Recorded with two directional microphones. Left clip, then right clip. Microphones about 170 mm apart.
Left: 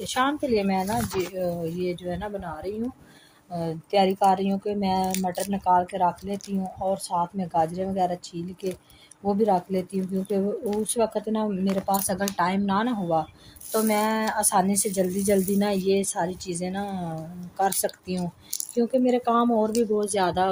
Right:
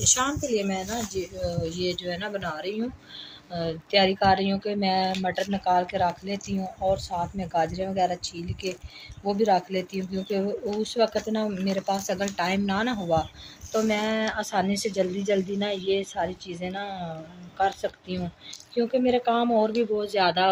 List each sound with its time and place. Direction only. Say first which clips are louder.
0.0 s speech: even; 60° left (ahead or behind)
3.5 s speech: even; 75° left (ahead or behind); by 13.2 s 50° left (ahead or behind)
13.8 s speech: left 3 dB; 65° left (ahead or behind); by 18.2 s 80° left
18.8 s speech: even; 70° left (ahead or behind)